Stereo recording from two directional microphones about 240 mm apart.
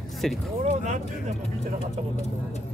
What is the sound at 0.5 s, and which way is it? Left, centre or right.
Speech, right.